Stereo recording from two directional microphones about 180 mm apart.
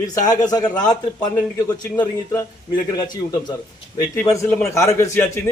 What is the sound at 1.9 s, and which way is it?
Speech, 15° left (ahead or behind).